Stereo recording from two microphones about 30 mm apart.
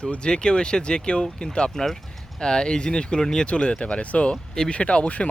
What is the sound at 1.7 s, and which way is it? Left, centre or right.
Speech, centre.